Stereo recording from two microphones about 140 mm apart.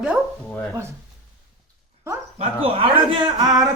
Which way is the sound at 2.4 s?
40° right (ahead or behind).